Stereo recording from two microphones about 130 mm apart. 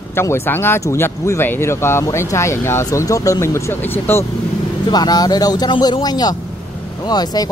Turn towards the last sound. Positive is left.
turn(degrees=30)  # may be behind; listen again after turning